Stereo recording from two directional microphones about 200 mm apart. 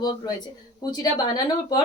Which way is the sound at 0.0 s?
20° left (ahead or behind).